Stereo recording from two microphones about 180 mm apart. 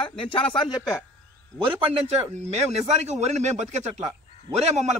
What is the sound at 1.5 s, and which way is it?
Speech, 10° left (ahead or behind).